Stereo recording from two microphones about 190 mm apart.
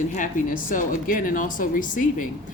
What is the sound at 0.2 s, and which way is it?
Speech, 45° left (ahead or behind).